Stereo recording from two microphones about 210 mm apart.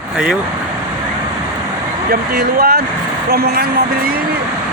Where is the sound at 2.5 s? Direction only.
45° right (ahead or behind).